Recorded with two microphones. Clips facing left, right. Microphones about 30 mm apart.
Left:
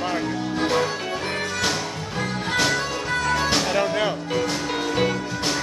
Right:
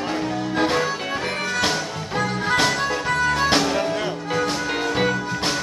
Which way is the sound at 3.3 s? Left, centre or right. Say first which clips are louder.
Right 1 dB; centre.